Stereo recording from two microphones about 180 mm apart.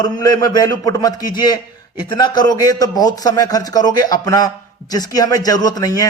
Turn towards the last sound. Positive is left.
turn(degrees=20)  # may be behind; listen again after turning